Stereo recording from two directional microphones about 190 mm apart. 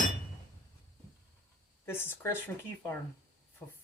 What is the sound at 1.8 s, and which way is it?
Speech, 10° left (ahead or behind).